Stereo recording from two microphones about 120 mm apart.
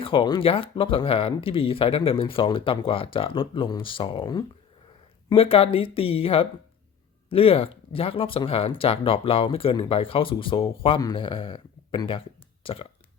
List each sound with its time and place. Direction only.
0.0 s speech: 45° left (ahead or behind)
5.3 s speech: 55° left (ahead or behind)